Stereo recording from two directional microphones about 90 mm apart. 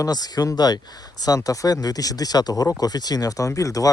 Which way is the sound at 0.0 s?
45° left (ahead or behind).